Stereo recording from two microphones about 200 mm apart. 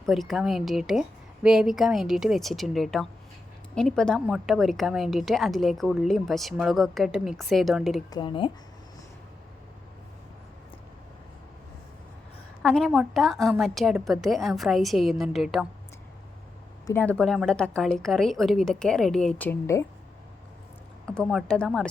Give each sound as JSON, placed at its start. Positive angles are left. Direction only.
{"t": 0.0, "sound": "a woman's voice", "side_deg": 0}
{"t": 8.1, "sound": "speech", "side_deg": 25}
{"t": 12.6, "sound": "a woman's voice", "side_deg": 0}
{"t": 16.8, "sound": "a woman's voice", "side_deg": 10}
{"t": 21.2, "sound": "a woman's voice", "side_deg": 0}